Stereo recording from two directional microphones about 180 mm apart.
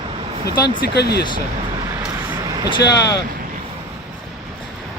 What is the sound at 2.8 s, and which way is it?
Speech, 70° left (ahead or behind).